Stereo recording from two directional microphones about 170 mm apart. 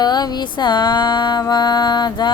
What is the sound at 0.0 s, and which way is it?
Music, 25° left (ahead or behind).